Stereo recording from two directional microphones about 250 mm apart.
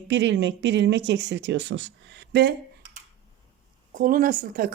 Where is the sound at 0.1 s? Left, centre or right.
Right.